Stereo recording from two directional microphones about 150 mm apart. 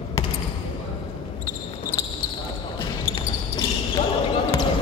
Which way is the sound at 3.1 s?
35° left (ahead or behind).